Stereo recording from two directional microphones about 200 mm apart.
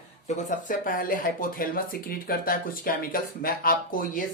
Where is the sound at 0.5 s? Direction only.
45° left (ahead or behind).